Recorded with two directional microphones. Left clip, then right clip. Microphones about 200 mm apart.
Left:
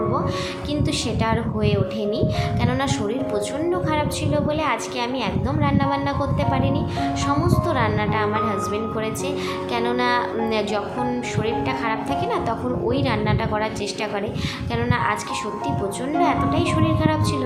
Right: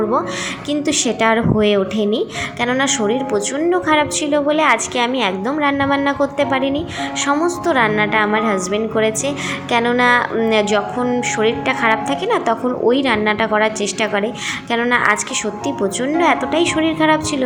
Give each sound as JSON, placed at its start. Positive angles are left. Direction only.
{"t": 0.7, "sound": "a woman's voice", "side_deg": -25}
{"t": 16.2, "sound": "a woman's voice", "side_deg": -25}